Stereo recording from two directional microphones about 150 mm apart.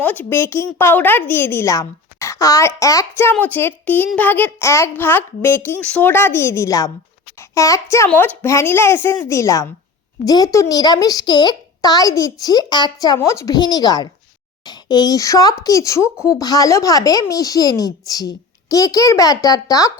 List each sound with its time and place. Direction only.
0.0 s a woman's voice: 10° left (ahead or behind)